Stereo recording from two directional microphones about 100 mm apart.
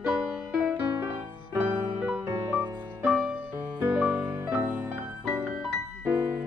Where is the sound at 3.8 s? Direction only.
15° right (ahead or behind).